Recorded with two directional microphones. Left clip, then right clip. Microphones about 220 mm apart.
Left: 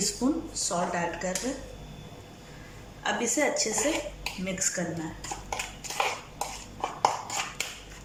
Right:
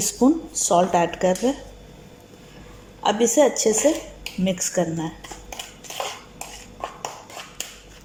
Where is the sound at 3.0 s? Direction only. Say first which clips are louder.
Right 9 dB; 30° right (ahead or behind).